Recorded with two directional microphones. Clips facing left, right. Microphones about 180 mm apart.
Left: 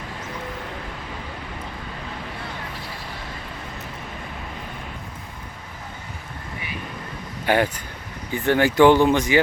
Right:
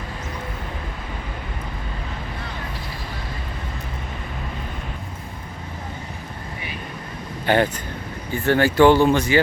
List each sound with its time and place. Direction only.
7.4 s speech: 10° left (ahead or behind)